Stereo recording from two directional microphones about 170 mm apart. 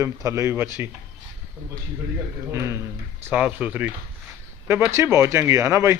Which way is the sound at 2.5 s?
15° right (ahead or behind).